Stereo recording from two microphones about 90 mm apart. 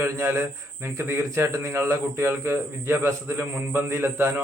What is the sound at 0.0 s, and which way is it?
A man's voice, 30° right (ahead or behind).